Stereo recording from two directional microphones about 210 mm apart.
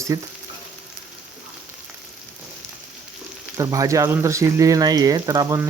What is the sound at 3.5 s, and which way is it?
Speech, 15° right (ahead or behind).